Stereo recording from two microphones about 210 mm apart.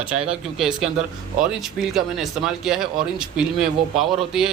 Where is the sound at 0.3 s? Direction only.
5° right (ahead or behind).